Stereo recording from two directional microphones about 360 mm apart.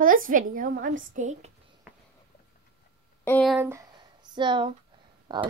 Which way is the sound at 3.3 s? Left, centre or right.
Centre.